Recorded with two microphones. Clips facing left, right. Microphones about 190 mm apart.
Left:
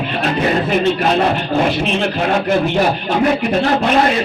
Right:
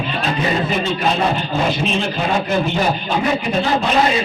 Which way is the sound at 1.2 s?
65° left (ahead or behind).